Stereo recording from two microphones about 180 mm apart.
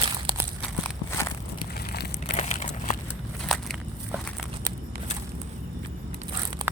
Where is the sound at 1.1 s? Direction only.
15° left (ahead or behind).